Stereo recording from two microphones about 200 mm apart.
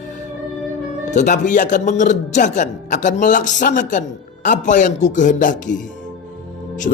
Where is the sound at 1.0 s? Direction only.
40° left (ahead or behind).